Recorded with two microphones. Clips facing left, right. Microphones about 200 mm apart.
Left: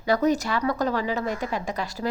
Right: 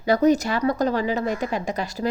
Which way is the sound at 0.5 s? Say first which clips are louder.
Right 3 dB; 25° right (ahead or behind).